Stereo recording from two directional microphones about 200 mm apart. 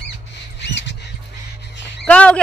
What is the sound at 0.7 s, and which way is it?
Rodents, 65° left (ahead or behind).